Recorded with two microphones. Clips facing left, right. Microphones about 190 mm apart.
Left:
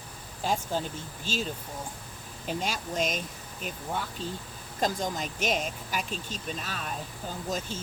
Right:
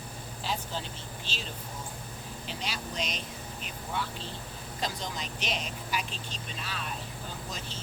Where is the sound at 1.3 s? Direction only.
45° left (ahead or behind).